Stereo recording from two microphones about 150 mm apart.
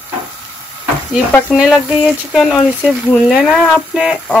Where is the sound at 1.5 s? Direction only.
5° right (ahead or behind).